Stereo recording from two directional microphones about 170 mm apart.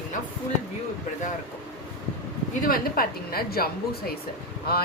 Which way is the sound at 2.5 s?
60° left (ahead or behind).